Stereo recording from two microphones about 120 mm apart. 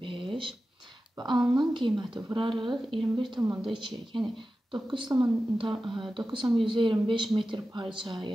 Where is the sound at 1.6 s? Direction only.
40° right (ahead or behind).